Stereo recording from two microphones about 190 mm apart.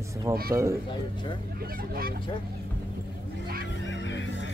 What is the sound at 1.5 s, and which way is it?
Speech, 50° right (ahead or behind).